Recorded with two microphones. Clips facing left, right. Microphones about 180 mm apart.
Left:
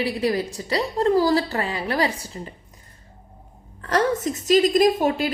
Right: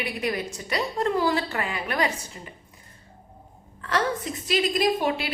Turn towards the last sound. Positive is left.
turn(degrees=45)  # may be behind; listen again after turning